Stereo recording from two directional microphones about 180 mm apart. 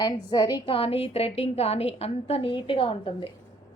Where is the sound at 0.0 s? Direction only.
25° left (ahead or behind).